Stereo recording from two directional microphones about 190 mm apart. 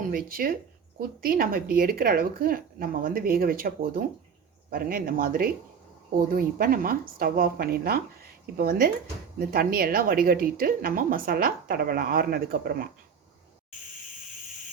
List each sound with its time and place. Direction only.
0.1 s a woman's voice: 50° right (ahead or behind)